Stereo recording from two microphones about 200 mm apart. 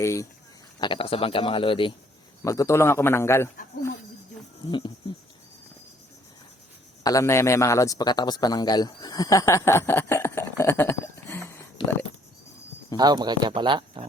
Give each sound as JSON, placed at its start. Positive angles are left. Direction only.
{"t": 0.0, "sound": "a man's voice", "side_deg": 15}
{"t": 0.8, "sound": "speech", "side_deg": 25}
{"t": 2.4, "sound": "a man's voice", "side_deg": 15}
{"t": 4.7, "sound": "speech", "side_deg": 25}
{"t": 7.0, "sound": "a man's voice", "side_deg": 15}
{"t": 13.0, "sound": "speech", "side_deg": -20}